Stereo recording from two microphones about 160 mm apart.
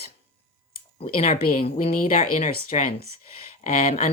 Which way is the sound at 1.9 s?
60° left (ahead or behind).